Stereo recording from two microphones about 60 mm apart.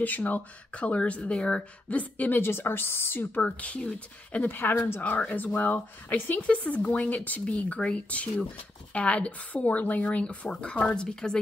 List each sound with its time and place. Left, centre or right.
0.0 s speech: left
2.4 s speech: left
5.0 s speech: left